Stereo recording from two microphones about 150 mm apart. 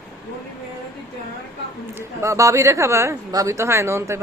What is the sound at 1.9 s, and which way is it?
Speech, 20° right (ahead or behind).